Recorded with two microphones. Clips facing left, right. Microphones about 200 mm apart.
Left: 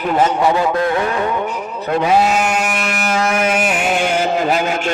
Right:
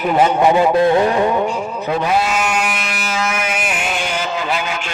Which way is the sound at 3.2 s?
35° left (ahead or behind).